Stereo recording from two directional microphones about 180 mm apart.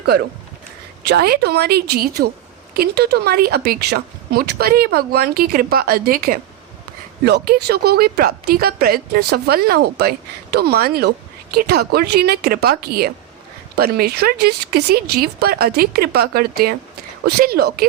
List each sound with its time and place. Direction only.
1.0 s a woman's voice: 65° right (ahead or behind)